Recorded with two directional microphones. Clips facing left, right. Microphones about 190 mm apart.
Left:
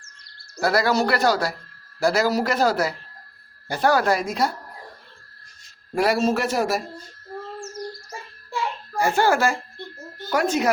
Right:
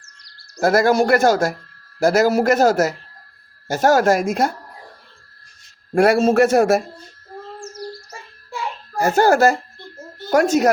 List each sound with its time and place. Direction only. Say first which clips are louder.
0.0 s a sound: even; 35° right (ahead or behind)
0.6 s speech: right 5 dB; 50° right (ahead or behind)
5.9 s speech: right 6 dB; 50° right (ahead or behind)
9.0 s speech: right 5 dB; 40° right (ahead or behind)